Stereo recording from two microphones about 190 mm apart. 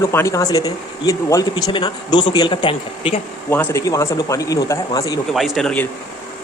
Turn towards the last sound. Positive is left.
turn(degrees=0)  # may be behind; listen again after turning